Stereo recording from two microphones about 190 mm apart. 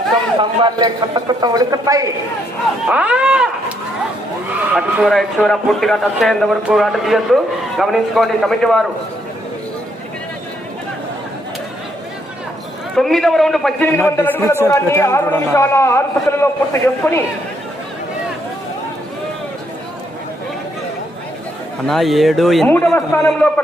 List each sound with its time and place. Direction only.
0.3 s a man's voice: 25° right (ahead or behind)
2.8 s a man's voice: 5° right (ahead or behind)
4.7 s a man's voice: 5° right (ahead or behind)
13.0 s a man's voice: centre (ahead or behind)
21.8 s a man's voice: centre (ahead or behind)